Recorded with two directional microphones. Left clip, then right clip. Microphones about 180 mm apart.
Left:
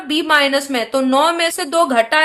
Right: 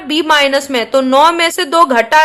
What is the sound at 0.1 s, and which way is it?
A woman's voice, 35° right (ahead or behind).